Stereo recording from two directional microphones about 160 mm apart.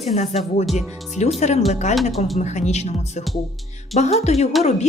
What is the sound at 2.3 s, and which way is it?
Speech, 45° left (ahead or behind).